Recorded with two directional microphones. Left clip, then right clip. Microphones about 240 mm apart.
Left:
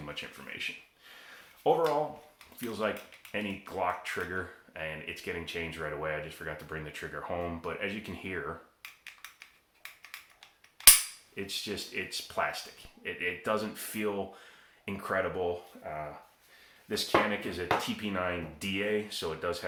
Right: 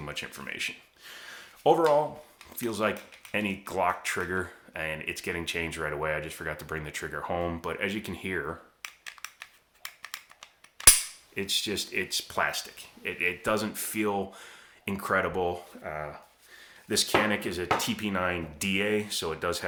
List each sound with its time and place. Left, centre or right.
0.1 s speech: right
9.4 s scissors: right
11.3 s speech: right
16.9 s speech: right